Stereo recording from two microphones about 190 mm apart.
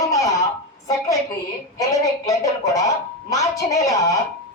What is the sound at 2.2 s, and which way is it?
Speech, 20° left (ahead or behind).